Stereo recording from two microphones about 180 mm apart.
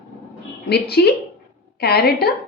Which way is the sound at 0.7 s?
60° left (ahead or behind).